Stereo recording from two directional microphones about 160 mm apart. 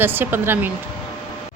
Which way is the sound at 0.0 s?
15° right (ahead or behind).